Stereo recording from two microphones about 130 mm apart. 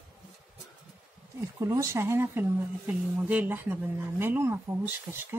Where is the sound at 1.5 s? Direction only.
25° right (ahead or behind).